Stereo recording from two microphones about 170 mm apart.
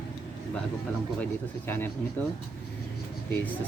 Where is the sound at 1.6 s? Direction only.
10° left (ahead or behind).